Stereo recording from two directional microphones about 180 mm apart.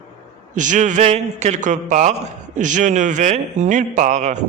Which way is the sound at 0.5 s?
45° right (ahead or behind).